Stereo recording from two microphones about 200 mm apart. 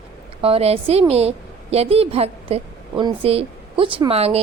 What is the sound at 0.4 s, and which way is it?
A woman's voice, 30° right (ahead or behind).